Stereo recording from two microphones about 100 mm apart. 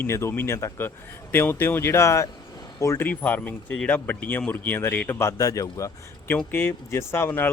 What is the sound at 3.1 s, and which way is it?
Speech, 15° left (ahead or behind).